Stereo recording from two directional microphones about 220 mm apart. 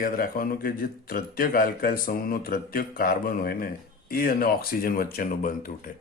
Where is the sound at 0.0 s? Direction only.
40° left (ahead or behind).